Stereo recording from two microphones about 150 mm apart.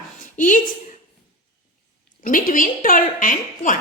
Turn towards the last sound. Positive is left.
turn(degrees=60)  # may be behind; listen again after turning